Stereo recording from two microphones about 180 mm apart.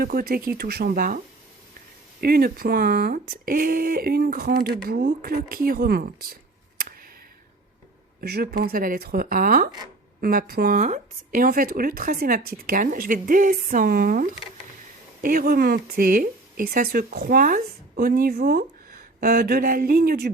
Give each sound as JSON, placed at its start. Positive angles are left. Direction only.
{"t": 0.0, "sound": "speech", "side_deg": -55}
{"t": 2.2, "sound": "speech", "side_deg": -55}
{"t": 8.2, "sound": "speech", "side_deg": -60}